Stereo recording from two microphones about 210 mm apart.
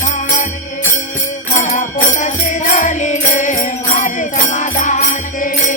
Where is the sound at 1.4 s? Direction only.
30° left (ahead or behind).